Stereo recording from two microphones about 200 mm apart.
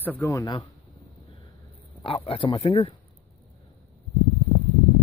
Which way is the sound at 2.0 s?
30° left (ahead or behind).